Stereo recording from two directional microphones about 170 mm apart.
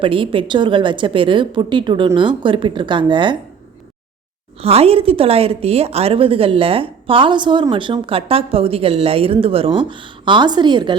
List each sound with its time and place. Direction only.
0.0 s a woman's voice: 30° right (ahead or behind)
4.6 s a woman's voice: 35° right (ahead or behind)